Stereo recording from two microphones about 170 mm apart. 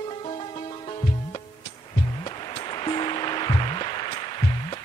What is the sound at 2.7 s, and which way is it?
Music, 25° left (ahead or behind).